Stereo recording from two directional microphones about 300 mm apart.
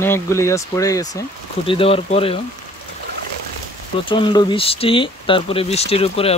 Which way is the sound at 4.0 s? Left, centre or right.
Centre.